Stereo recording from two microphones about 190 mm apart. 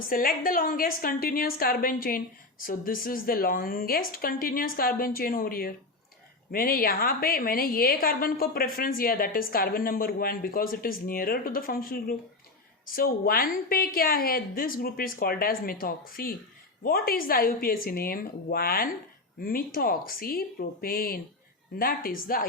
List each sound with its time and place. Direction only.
0.1 s a woman's voice: 50° left (ahead or behind)